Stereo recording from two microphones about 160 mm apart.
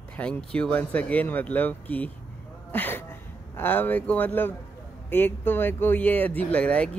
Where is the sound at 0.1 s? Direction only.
5° left (ahead or behind).